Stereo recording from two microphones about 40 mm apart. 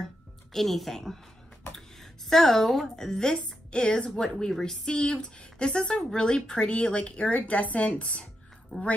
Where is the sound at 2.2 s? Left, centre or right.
Centre.